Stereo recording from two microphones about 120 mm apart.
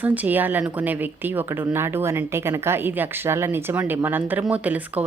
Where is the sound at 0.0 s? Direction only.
15° right (ahead or behind).